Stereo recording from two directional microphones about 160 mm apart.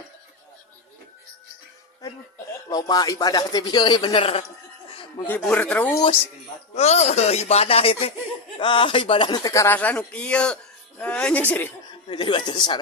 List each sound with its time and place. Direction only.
2.6 s a man's voice: 25° left (ahead or behind)
5.2 s speech: 10° left (ahead or behind)
6.7 s speech: 45° left (ahead or behind); by 11.7 s 10° left (ahead or behind)
12.0 s a man's voice: 30° left (ahead or behind)